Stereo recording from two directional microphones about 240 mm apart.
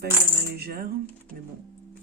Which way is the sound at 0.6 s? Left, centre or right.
Right.